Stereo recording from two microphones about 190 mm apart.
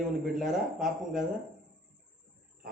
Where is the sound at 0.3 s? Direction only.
Centre (ahead or behind).